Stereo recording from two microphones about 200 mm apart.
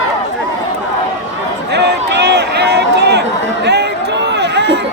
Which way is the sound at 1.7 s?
55° right (ahead or behind).